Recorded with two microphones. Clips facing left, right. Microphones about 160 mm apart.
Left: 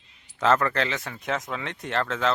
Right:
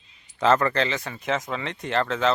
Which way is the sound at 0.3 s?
Centre (ahead or behind).